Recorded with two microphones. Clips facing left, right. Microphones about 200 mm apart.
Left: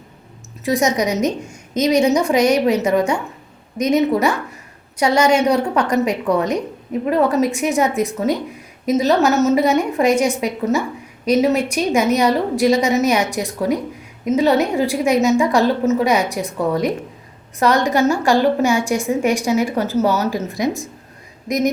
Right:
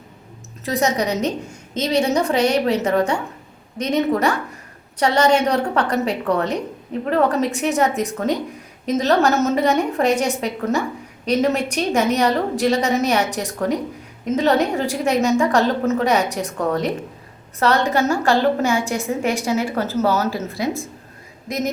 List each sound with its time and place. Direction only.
0.6 s a woman's voice: 10° left (ahead or behind)
4.9 s a woman's voice: 10° left (ahead or behind)